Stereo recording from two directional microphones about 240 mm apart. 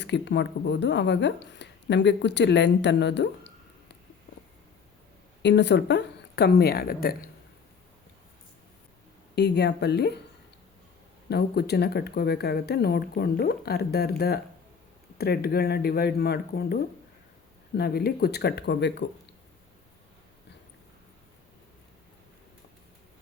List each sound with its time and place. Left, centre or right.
0.0 s speech: left
5.4 s speech: left
9.3 s speech: left
11.3 s speech: left